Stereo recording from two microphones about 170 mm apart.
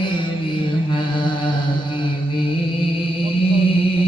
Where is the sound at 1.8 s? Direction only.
30° left (ahead or behind).